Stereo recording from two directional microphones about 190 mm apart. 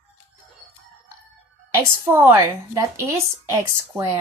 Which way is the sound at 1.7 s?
15° right (ahead or behind).